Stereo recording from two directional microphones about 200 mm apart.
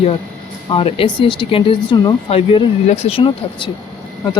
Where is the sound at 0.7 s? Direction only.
25° left (ahead or behind).